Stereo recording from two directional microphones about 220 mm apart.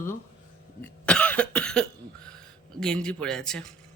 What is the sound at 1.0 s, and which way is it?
Cough, 5° left (ahead or behind).